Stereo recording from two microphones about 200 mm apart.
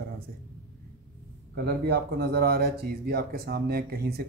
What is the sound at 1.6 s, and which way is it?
Speech, 50° right (ahead or behind).